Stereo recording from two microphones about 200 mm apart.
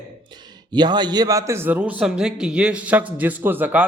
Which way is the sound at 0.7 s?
20° right (ahead or behind).